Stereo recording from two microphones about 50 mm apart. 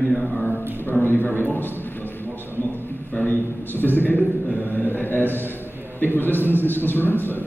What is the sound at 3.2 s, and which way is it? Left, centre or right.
A man's voice, left.